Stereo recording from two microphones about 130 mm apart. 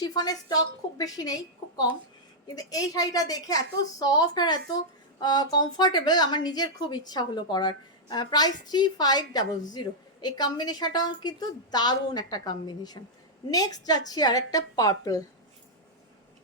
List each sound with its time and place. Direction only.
0.0 s a woman's voice: 30° left (ahead or behind)